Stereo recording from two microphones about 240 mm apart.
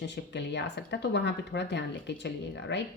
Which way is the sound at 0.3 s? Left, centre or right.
Left.